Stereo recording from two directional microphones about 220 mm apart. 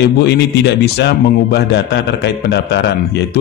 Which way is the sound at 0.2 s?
50° left (ahead or behind).